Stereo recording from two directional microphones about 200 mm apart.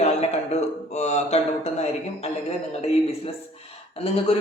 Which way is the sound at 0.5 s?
35° left (ahead or behind).